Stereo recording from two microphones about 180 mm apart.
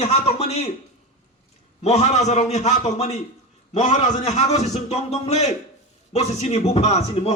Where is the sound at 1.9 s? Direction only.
40° left (ahead or behind).